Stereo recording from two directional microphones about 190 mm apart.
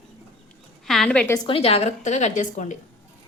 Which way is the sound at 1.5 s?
30° left (ahead or behind).